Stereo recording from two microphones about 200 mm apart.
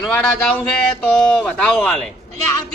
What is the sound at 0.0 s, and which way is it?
Speech, 5° left (ahead or behind).